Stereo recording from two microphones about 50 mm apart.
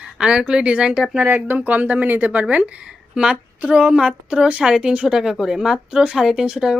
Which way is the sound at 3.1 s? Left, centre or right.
Centre.